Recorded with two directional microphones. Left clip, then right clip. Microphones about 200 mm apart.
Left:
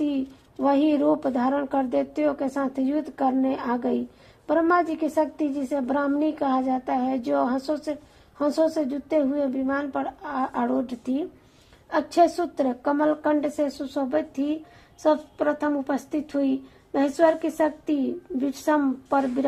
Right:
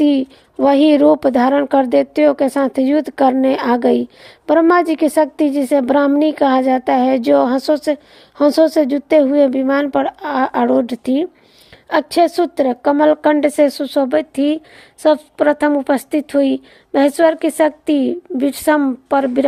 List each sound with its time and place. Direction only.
0.0 s a woman's voice: 40° right (ahead or behind)